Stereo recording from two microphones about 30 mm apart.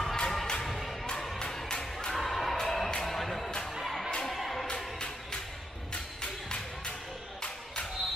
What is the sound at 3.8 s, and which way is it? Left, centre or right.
Music, centre.